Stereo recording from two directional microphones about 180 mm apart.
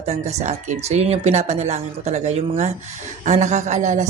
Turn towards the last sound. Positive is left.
turn(degrees=-40)  # may be behind; listen again after turning